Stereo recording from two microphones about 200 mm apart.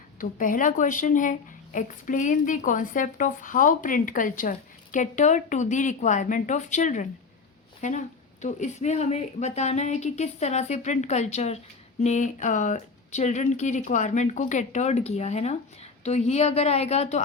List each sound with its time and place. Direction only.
0.2 s a woman's voice: 40° left (ahead or behind)